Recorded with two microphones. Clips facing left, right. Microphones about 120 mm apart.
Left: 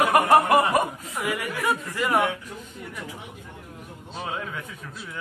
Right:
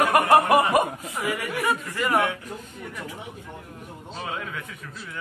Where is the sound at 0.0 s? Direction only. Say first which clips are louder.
Even; centre (ahead or behind).